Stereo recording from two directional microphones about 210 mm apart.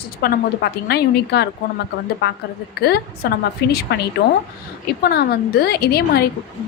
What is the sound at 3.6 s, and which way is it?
Speech, 50° left (ahead or behind).